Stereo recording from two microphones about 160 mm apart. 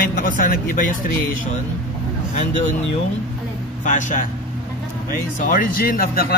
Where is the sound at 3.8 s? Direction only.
50° left (ahead or behind).